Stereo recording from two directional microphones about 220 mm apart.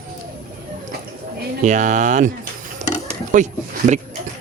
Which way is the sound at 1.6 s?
35° right (ahead or behind).